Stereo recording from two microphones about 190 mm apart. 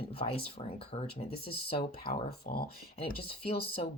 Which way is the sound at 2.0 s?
50° left (ahead or behind).